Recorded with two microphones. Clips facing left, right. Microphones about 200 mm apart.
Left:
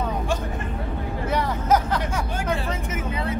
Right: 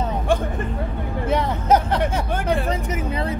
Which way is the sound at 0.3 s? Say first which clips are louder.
Right 9 dB; 55° right (ahead or behind).